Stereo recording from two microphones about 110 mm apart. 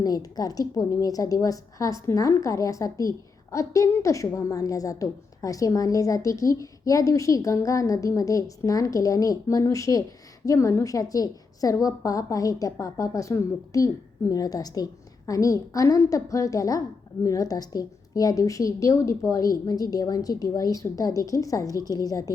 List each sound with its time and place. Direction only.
0.0 s a woman's voice: 35° left (ahead or behind)